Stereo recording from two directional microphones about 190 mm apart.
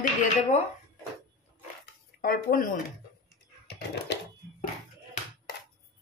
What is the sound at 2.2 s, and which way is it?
Speech, 50° left (ahead or behind).